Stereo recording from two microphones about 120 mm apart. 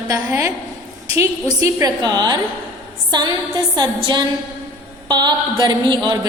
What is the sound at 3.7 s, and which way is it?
A woman's voice, 35° right (ahead or behind).